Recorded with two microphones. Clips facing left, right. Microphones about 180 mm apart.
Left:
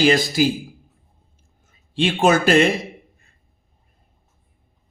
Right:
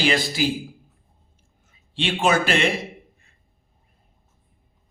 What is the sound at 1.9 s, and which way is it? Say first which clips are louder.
Speech: left 4 dB; 45° left (ahead or behind).